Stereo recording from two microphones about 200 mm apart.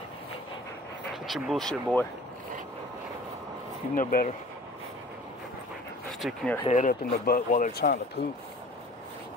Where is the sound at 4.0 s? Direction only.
45° left (ahead or behind).